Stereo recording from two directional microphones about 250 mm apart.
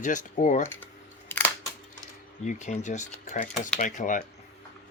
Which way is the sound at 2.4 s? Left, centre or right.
Left.